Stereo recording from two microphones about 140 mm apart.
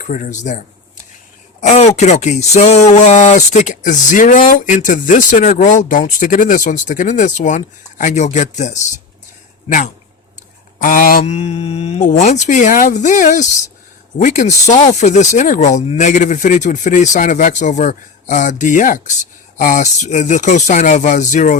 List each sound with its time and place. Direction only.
0.0 s speech: 65° left (ahead or behind)
1.6 s speech: 55° left (ahead or behind)
10.8 s speech: 80° left
11.3 s mantra: 50° left (ahead or behind)
12.0 s speech: 55° left (ahead or behind)